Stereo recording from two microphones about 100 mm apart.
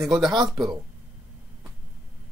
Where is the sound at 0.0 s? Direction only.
Centre (ahead or behind).